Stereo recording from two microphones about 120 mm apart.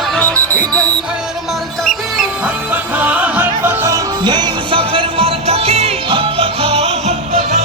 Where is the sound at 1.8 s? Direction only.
Centre (ahead or behind).